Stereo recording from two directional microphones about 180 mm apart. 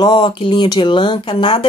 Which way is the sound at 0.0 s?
25° left (ahead or behind).